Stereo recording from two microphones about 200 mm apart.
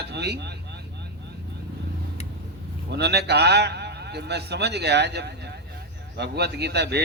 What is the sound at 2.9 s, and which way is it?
Speech, 55° right (ahead or behind).